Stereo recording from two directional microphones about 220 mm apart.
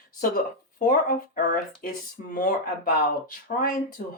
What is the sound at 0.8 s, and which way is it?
Speech, 35° left (ahead or behind).